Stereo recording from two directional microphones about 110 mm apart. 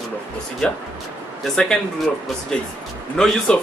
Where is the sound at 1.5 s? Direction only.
5° left (ahead or behind).